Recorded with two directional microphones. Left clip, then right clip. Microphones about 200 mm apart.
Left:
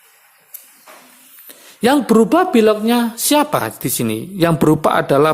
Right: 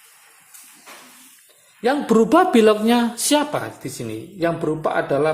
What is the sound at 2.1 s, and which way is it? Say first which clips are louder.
Speech: left 2 dB; 15° left (ahead or behind).